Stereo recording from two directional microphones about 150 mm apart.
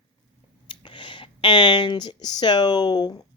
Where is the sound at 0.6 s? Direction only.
35° left (ahead or behind).